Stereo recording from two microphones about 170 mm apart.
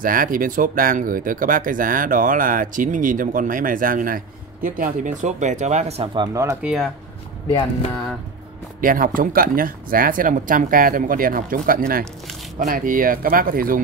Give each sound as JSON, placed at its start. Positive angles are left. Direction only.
{"t": 0.0, "sound": "speech", "side_deg": -55}
{"t": 6.2, "sound": "speech", "side_deg": -20}
{"t": 6.6, "sound": "speech", "side_deg": -5}
{"t": 8.8, "sound": "speech", "side_deg": -55}